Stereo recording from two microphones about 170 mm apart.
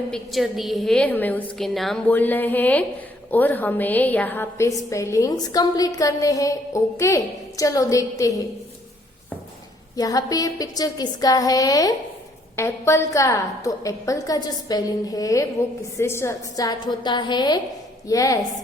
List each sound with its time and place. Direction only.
0.1 s a woman's voice: centre (ahead or behind); by 8.3 s 20° left (ahead or behind)
9.9 s a woman's voice: 20° left (ahead or behind)